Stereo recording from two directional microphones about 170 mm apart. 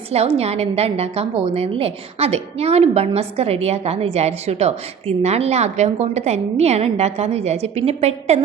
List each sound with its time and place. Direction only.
0.1 s a woman's voice: 40° right (ahead or behind)